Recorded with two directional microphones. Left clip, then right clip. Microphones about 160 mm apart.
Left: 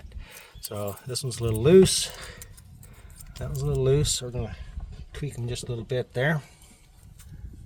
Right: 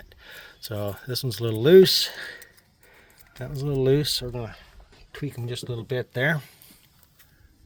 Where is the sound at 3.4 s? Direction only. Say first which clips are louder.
Right 2 dB; 15° right (ahead or behind).